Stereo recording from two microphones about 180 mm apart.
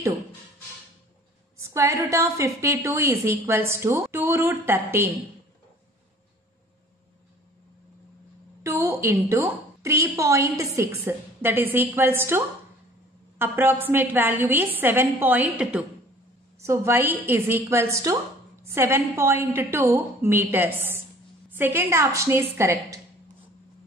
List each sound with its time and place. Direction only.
1.6 s a woman's voice: 15° right (ahead or behind)
8.6 s a woman's voice: 15° right (ahead or behind)